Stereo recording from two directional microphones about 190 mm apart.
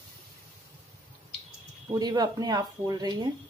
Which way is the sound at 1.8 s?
20° right (ahead or behind).